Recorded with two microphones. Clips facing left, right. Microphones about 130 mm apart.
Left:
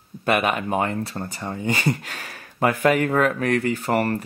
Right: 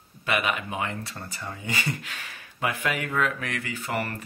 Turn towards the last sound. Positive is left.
turn(degrees=35)  # may be behind; listen again after turning